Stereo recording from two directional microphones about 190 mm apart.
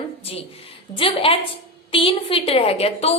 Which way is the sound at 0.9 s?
30° left (ahead or behind).